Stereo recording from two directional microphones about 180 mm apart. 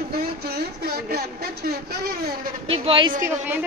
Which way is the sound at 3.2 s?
10° right (ahead or behind).